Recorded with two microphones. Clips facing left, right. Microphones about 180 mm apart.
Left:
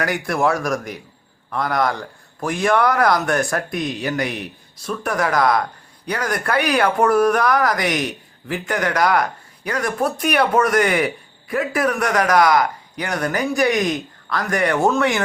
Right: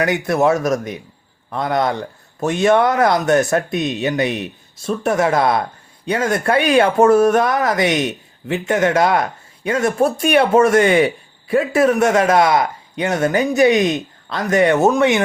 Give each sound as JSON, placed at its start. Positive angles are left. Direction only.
{"t": 0.0, "sound": "speech", "side_deg": -20}